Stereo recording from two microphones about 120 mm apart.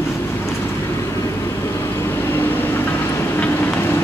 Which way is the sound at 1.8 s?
20° left (ahead or behind).